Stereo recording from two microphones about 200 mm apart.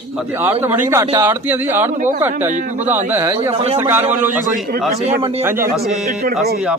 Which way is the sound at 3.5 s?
30° right (ahead or behind).